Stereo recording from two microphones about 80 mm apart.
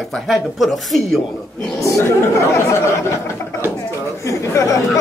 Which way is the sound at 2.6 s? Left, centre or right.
Left.